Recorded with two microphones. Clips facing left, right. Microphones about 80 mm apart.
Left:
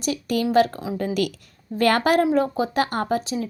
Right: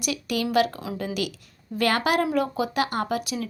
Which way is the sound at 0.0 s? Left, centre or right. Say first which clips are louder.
Left 4 dB; left.